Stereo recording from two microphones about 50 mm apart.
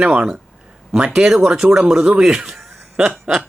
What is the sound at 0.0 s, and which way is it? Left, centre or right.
Speech, right.